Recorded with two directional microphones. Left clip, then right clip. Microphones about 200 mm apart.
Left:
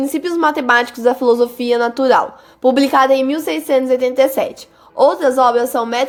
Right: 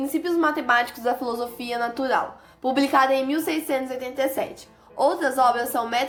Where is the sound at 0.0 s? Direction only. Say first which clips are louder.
Left 7 dB; 35° left (ahead or behind).